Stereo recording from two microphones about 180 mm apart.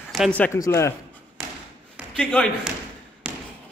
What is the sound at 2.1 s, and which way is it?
Speech, 5° left (ahead or behind).